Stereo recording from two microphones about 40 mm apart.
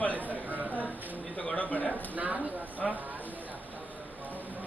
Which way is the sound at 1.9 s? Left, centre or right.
Right.